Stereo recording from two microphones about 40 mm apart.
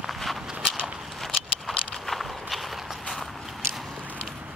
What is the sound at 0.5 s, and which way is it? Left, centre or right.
Walk, right.